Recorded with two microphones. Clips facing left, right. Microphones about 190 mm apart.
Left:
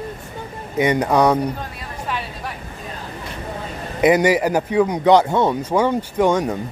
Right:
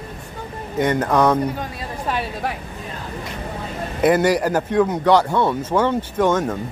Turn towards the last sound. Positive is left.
turn(degrees=15)  # may be behind; listen again after turning